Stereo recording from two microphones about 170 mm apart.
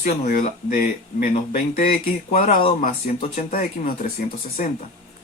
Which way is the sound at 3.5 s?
55° left (ahead or behind).